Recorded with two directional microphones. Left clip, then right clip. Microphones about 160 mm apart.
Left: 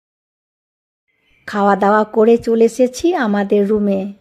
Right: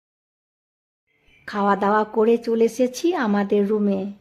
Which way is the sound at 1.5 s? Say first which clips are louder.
Left 6 dB; 30° left (ahead or behind).